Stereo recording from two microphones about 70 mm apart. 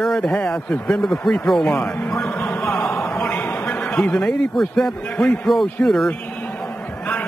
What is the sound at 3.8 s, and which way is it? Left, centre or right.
A man's voice, centre.